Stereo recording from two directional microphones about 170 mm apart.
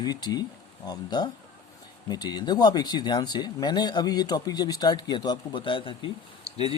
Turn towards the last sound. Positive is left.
turn(degrees=35)  # may be behind; listen again after turning